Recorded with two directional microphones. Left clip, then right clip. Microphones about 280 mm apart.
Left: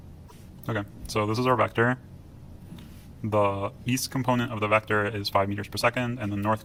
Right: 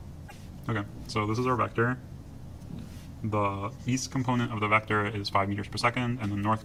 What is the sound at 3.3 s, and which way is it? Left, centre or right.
Speech, left.